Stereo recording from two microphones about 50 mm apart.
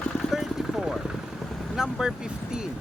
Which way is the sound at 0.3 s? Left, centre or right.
Centre.